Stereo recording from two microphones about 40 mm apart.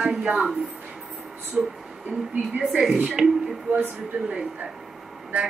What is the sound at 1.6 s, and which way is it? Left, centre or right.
Speech, right.